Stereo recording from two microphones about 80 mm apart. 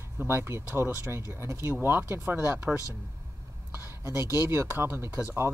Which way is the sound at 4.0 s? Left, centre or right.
Right.